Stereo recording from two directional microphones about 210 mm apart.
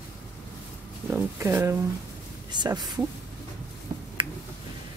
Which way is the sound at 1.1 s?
10° right (ahead or behind).